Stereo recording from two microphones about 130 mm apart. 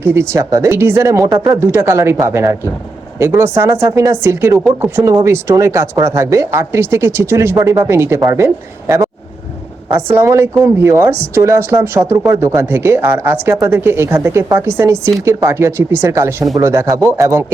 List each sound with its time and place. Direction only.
0.0 s speech: 20° right (ahead or behind)